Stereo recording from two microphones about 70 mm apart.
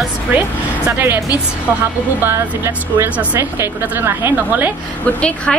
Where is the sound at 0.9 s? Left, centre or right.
Right.